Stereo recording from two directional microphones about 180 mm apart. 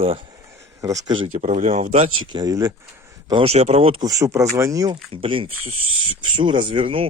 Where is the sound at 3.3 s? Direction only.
30° right (ahead or behind).